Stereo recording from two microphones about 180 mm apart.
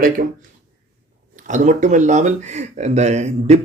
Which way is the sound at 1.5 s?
45° right (ahead or behind).